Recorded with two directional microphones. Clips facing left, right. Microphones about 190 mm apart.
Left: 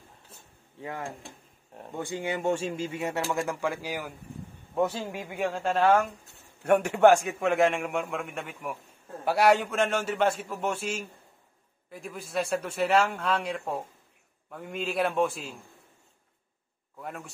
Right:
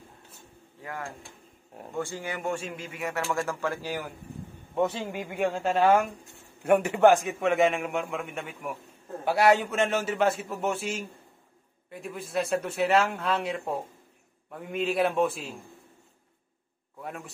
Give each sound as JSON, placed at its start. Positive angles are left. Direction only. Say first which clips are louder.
{"t": 0.8, "sound": "speech", "louder": "left 2 dB", "side_deg": 25}
{"t": 3.3, "sound": "speech", "louder": "even", "side_deg": 15}
{"t": 4.7, "sound": "a man's voice", "louder": "even", "side_deg": 0}